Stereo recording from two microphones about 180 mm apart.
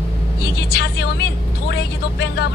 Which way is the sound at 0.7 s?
70° left (ahead or behind).